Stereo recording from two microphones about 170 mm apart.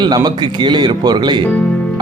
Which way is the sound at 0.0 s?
25° right (ahead or behind).